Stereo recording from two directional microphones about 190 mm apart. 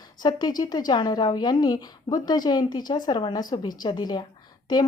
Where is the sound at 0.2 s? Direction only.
20° left (ahead or behind).